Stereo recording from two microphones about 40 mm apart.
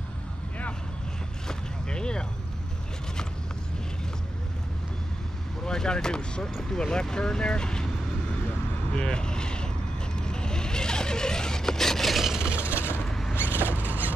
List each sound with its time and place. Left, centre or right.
1.5 s vehicle: left
5.7 s speech: centre
8.9 s speech: left
10.1 s a sound: centre
12.4 s vehicle: right
12.6 s vehicle: right
13.6 s a sound: right